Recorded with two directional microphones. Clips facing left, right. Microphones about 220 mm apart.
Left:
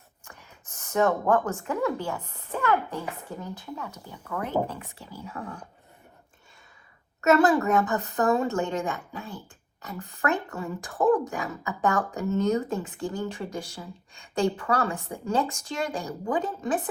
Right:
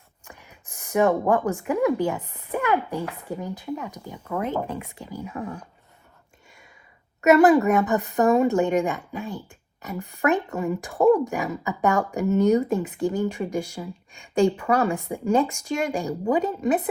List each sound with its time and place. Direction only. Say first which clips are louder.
0.3 s speech: right 3 dB; 15° right (ahead or behind)
7.2 s speech: right 5 dB; 15° right (ahead or behind)